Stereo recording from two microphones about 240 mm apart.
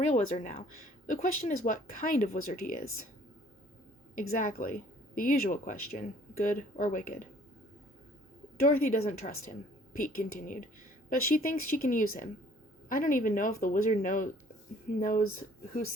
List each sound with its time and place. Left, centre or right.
0.0 s speech: left
4.2 s speech: left
8.6 s speech: left